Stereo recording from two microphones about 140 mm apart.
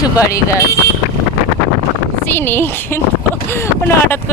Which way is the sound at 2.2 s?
15° left (ahead or behind).